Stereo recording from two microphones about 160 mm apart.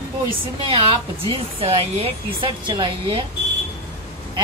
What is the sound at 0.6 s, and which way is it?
Speech, 35° right (ahead or behind).